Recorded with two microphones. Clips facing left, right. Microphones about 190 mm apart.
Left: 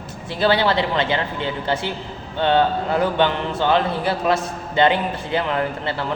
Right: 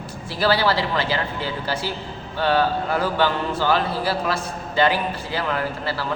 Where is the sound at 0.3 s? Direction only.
20° left (ahead or behind).